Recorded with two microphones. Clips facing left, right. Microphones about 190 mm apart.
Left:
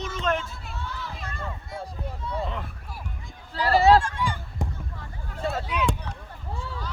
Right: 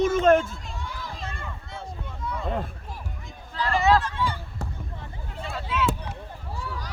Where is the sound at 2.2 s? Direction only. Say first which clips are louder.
Left 2 dB; 30° left (ahead or behind).